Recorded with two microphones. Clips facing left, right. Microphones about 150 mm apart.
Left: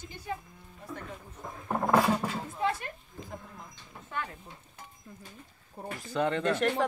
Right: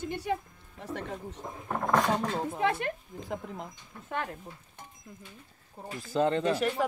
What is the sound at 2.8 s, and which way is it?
Speech, 85° right.